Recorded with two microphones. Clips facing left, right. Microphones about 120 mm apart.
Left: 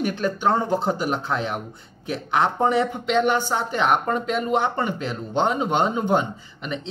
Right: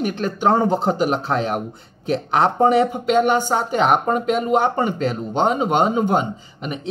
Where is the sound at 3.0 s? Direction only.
45° right (ahead or behind).